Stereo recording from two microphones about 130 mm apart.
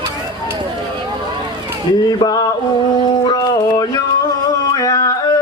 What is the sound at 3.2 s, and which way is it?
Music, 30° left (ahead or behind).